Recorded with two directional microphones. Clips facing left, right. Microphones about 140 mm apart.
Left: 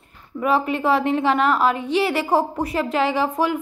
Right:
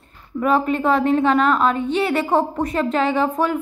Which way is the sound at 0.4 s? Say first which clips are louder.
Right 2 dB; 10° left (ahead or behind).